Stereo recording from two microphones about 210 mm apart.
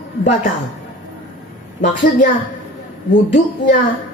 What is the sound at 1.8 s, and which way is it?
Speech, 35° left (ahead or behind).